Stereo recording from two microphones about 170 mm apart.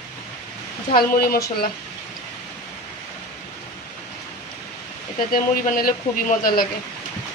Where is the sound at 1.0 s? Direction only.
60° left (ahead or behind).